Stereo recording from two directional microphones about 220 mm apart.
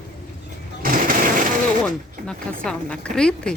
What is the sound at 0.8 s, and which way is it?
Machine gun, 40° right (ahead or behind).